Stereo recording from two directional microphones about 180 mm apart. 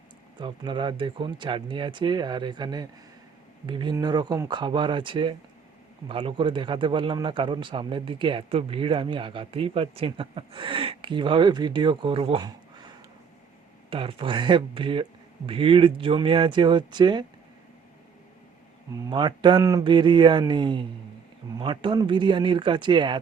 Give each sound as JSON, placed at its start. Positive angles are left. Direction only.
{"t": 0.3, "sound": "a man's voice", "side_deg": -25}
{"t": 13.9, "sound": "a man's voice", "side_deg": -30}
{"t": 19.1, "sound": "a man's voice", "side_deg": -25}